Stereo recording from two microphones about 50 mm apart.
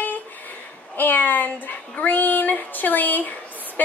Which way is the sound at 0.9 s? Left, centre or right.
Left.